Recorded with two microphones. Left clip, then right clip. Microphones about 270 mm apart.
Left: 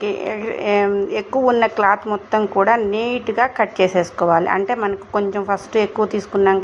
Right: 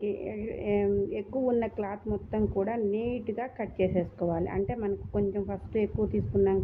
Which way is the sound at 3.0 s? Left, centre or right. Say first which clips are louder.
Left 15 dB; left.